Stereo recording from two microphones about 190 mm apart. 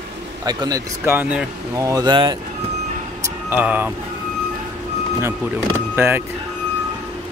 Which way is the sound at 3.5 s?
10° right (ahead or behind).